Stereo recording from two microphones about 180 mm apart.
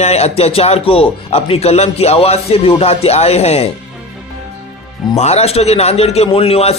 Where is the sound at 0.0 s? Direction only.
35° left (ahead or behind).